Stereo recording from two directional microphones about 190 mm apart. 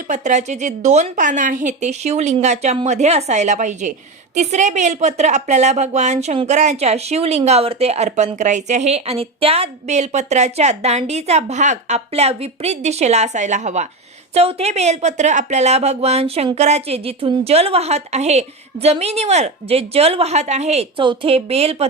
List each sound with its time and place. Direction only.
0.1 s a woman's voice: 40° right (ahead or behind)